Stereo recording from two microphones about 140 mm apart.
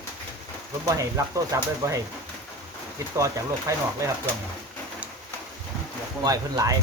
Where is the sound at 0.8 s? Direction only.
25° right (ahead or behind).